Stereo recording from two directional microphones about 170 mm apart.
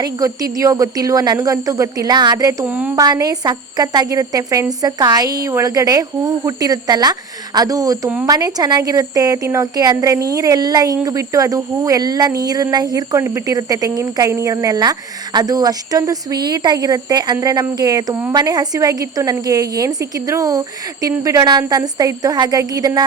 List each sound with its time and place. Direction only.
0.0 s speech: 20° right (ahead or behind)
2.6 s a woman's voice: 10° right (ahead or behind)
3.0 s speech: 20° right (ahead or behind)